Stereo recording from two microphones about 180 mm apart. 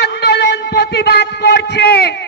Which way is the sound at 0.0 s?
70° left (ahead or behind).